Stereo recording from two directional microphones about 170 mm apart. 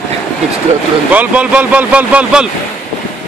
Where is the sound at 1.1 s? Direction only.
10° right (ahead or behind).